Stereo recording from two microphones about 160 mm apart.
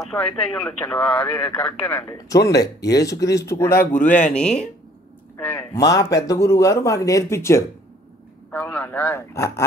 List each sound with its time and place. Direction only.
0.0 s speech: 10° left (ahead or behind)
2.0 s speech: 20° left (ahead or behind)
4.0 s speech: 50° left (ahead or behind)
4.3 s speech: 5° left (ahead or behind)
5.8 s speech: 20° left (ahead or behind)